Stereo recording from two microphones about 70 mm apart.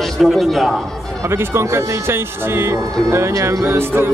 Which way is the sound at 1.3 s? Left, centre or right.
Right.